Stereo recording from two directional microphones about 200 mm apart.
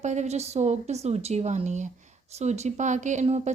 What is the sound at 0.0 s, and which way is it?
Speech, 35° right (ahead or behind).